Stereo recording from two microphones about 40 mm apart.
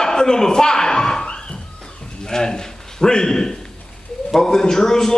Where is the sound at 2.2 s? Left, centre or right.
Centre.